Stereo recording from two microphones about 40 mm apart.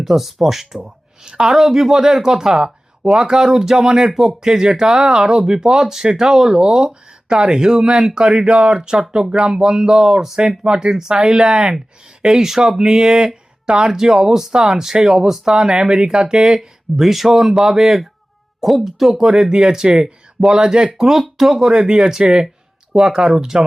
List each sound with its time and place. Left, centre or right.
0.0 s speech: centre
1.2 s speech: centre
16.6 s speech: centre
19.3 s speech: right
21.1 s speech: centre
22.2 s speech: right